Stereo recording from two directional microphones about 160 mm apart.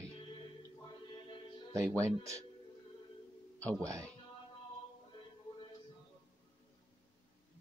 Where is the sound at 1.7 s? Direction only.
20° right (ahead or behind).